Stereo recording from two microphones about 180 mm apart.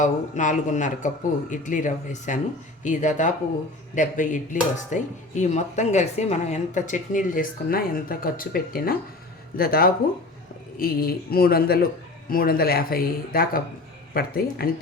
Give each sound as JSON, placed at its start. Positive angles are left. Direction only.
{"t": 0.0, "sound": "a woman's voice", "side_deg": 45}